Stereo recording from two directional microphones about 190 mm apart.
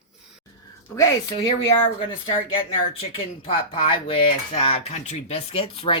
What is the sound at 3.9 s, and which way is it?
Speech, 30° left (ahead or behind).